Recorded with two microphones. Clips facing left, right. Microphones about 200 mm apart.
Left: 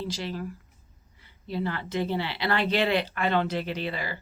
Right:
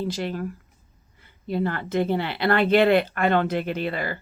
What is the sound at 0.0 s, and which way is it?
A woman's voice, 50° right (ahead or behind).